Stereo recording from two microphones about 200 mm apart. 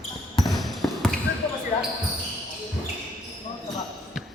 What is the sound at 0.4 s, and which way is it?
Basketball bounce, centre (ahead or behind).